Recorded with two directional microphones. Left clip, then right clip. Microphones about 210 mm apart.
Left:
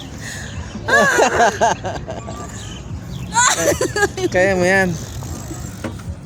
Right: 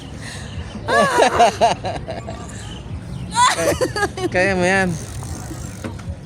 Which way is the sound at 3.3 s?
Centre (ahead or behind).